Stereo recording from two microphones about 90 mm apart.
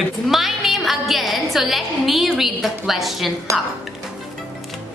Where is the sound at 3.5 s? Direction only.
40° right (ahead or behind).